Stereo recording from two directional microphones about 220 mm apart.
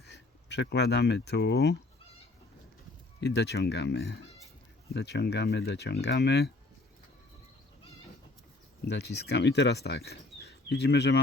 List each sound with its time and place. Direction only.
0.0 s speech: 50° left (ahead or behind)
3.2 s speech: 50° left (ahead or behind)
8.8 s speech: 50° left (ahead or behind)